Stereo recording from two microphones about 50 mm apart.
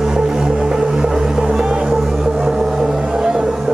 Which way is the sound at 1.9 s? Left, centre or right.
Centre.